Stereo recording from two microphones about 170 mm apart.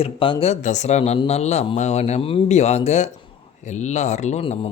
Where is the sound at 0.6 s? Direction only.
45° left (ahead or behind).